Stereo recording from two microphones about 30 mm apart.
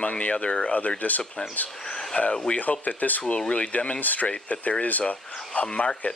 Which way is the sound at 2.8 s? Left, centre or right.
Left.